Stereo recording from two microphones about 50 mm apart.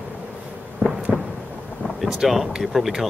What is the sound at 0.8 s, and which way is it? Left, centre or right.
Fireworks, right.